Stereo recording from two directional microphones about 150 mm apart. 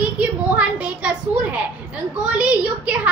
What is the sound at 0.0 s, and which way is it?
A child's voice, 10° right (ahead or behind).